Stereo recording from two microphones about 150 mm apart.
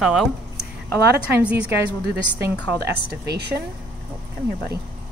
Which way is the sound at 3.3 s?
90° right.